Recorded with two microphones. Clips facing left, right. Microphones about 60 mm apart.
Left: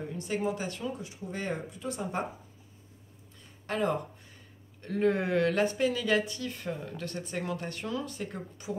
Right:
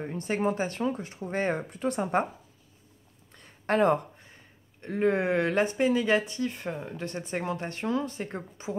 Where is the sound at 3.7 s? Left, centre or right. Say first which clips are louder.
Right 7 dB; right.